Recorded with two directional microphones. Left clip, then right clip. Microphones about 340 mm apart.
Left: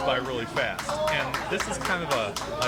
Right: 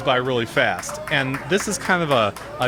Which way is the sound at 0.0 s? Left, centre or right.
Right.